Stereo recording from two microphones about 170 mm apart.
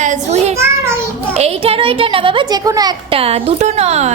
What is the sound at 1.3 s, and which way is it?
A woman's voice, 35° right (ahead or behind).